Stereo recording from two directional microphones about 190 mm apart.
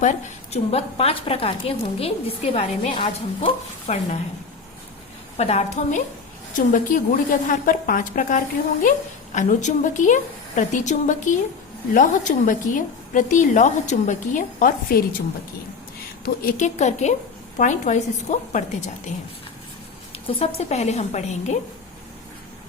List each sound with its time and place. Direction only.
0.0 s a woman's voice: 35° left (ahead or behind)
5.4 s a woman's voice: 35° left (ahead or behind)
16.2 s a woman's voice: 45° left (ahead or behind)
20.1 s a woman's voice: 35° left (ahead or behind)